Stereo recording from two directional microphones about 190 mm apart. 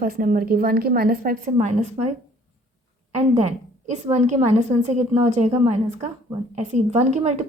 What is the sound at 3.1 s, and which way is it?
A woman's voice, 35° right (ahead or behind).